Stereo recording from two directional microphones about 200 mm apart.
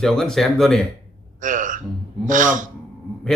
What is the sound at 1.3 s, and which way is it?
Gasp, 40° right (ahead or behind).